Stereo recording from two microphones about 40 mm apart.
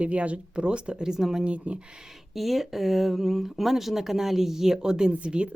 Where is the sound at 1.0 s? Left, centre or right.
Centre.